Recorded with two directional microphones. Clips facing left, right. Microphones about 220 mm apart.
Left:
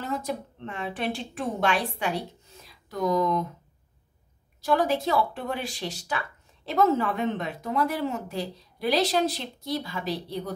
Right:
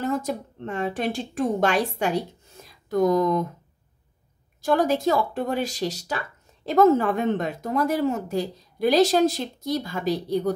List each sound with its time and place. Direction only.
0.0 s a woman's voice: 45° right (ahead or behind)
4.6 s speech: 45° right (ahead or behind)